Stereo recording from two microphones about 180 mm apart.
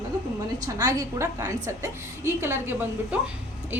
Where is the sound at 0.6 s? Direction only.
20° right (ahead or behind).